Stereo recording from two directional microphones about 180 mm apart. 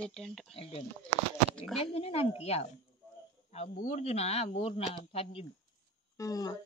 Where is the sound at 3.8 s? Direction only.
40° left (ahead or behind).